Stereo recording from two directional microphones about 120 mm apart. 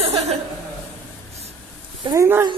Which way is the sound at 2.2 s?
20° right (ahead or behind).